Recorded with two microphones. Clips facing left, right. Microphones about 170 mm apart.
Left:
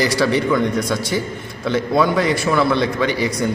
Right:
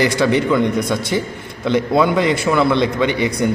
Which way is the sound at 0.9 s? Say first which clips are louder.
Right 1 dB; 25° right (ahead or behind).